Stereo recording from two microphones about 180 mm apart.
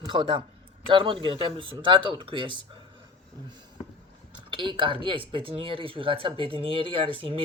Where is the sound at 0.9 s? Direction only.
30° right (ahead or behind).